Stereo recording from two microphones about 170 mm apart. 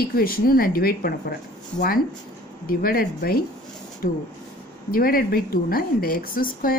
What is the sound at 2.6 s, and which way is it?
A woman's voice, 60° left (ahead or behind).